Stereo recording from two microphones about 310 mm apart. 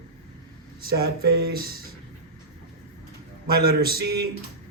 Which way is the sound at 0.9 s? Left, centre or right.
Right.